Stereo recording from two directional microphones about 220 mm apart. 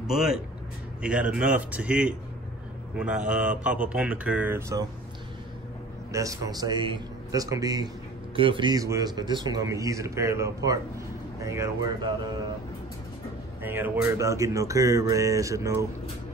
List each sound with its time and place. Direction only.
0.0 s speech: centre (ahead or behind)
6.1 s a man's voice: 15° right (ahead or behind)
13.6 s a man's voice: 10° right (ahead or behind)